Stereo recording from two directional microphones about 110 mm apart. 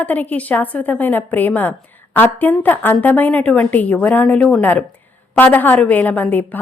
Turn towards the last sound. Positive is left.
turn(degrees=15)  # may be behind; listen again after turning